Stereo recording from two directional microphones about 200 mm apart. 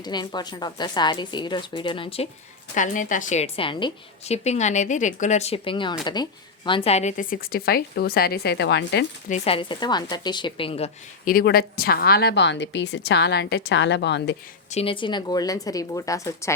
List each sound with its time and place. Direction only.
0.0 s a woman's voice: 20° left (ahead or behind)
2.7 s a woman's voice: 40° left (ahead or behind); by 9.0 s 60° left (ahead or behind)
9.3 s a woman's voice: 30° left (ahead or behind)
11.3 s a woman's voice: 45° left (ahead or behind)
14.7 s speech: 30° left (ahead or behind)